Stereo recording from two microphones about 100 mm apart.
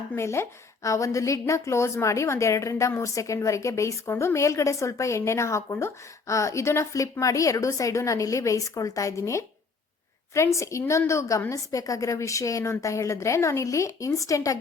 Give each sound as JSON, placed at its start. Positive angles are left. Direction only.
{"t": 0.2, "sound": "a woman's voice", "side_deg": 30}